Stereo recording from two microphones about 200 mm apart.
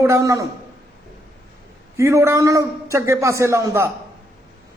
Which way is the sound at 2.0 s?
15° right (ahead or behind).